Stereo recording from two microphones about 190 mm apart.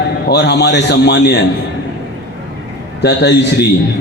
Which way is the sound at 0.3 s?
60° left (ahead or behind).